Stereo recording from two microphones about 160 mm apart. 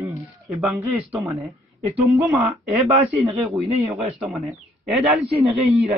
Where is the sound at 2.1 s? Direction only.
Centre (ahead or behind).